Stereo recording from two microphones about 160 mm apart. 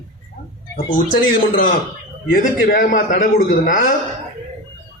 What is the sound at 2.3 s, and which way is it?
A man's voice, 55° left (ahead or behind).